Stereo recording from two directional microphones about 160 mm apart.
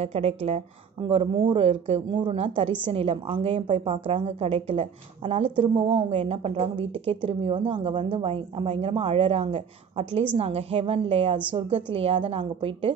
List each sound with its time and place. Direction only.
0.0 s a woman's voice: 40° right (ahead or behind)